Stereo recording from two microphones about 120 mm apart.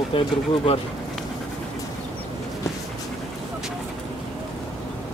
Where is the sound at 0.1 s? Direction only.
45° left (ahead or behind).